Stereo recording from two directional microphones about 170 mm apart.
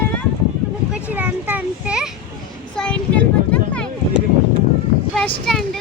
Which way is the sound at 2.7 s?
5° left (ahead or behind).